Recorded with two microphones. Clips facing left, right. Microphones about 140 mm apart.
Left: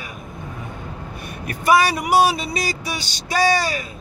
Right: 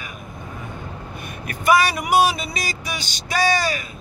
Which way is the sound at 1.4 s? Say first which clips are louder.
Left 1 dB; 35° left (ahead or behind).